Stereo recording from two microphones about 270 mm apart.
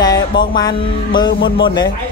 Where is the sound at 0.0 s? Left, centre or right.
Centre.